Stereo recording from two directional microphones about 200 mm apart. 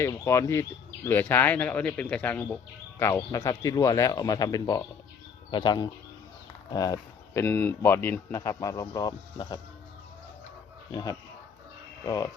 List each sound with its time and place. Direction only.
0.0 s speech: 15° left (ahead or behind)
10.9 s speech: 20° left (ahead or behind)